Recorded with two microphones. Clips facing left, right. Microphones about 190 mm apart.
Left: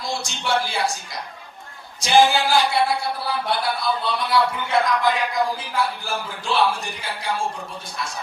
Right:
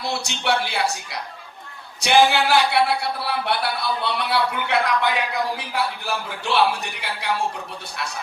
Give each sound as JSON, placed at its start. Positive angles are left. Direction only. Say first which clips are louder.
{"t": 0.0, "sound": "a man's voice", "louder": "right 2 dB", "side_deg": -65}